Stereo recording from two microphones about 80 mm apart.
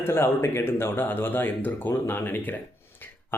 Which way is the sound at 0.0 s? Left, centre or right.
Left.